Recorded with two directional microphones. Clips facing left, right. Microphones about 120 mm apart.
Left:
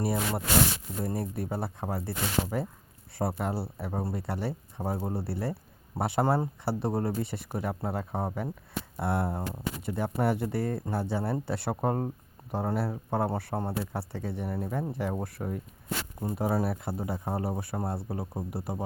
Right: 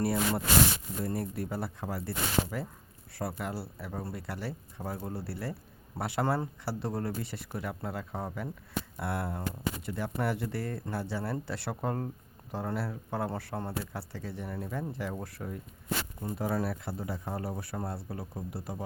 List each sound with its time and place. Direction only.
0.0 s speech: 15° left (ahead or behind)
18.5 s speech: 15° left (ahead or behind)